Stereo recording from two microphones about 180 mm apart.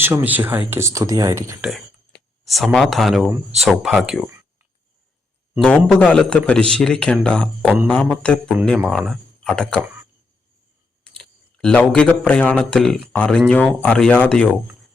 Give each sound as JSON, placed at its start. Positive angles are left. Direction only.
{"t": 0.0, "sound": "speech", "side_deg": -10}
{"t": 2.7, "sound": "speech", "side_deg": 0}
{"t": 5.6, "sound": "speech", "side_deg": 5}
{"t": 11.2, "sound": "speech", "side_deg": 5}